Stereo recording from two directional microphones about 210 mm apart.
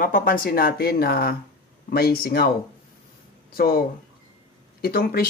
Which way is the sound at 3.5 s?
45° left (ahead or behind).